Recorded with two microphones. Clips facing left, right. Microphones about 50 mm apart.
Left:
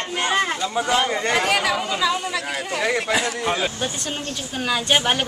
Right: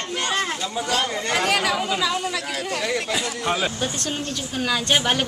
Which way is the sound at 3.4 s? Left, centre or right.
Centre.